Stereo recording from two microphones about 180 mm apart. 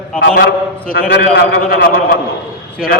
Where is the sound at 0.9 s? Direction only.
55° left (ahead or behind).